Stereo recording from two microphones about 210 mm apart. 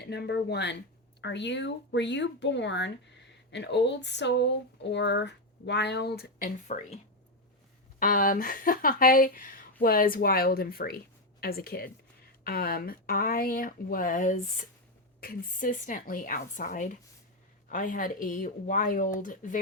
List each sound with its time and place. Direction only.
0.0 s speech: 50° left (ahead or behind)
7.9 s speech: 40° left (ahead or behind)